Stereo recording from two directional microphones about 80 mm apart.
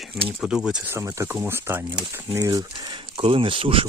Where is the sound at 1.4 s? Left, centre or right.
Right.